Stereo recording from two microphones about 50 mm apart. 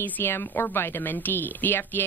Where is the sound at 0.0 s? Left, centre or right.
Left.